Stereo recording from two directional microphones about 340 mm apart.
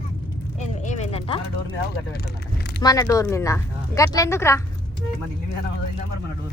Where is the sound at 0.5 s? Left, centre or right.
Centre.